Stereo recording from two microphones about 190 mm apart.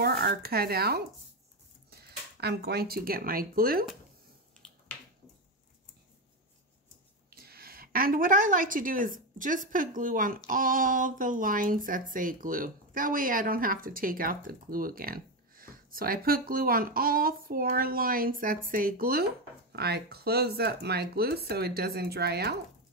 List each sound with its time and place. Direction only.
0.0 s speech: 55° right (ahead or behind)
7.2 s a woman's voice: 55° right (ahead or behind)